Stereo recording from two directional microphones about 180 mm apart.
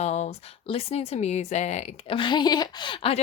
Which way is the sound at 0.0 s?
40° left (ahead or behind).